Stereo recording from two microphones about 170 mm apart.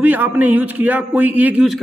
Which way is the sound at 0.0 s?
10° right (ahead or behind).